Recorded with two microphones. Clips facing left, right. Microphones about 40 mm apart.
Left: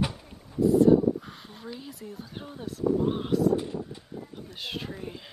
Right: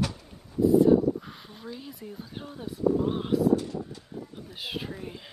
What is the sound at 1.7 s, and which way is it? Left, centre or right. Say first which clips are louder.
Speech: even; centre.